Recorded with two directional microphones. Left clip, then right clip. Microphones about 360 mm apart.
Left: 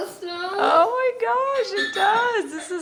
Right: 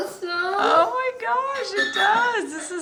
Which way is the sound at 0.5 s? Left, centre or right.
Centre.